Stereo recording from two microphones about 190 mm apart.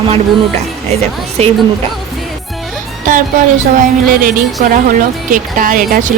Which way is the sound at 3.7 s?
45° right (ahead or behind).